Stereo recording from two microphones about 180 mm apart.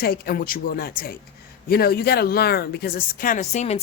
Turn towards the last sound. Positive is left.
turn(degrees=40)  # may be behind; listen again after turning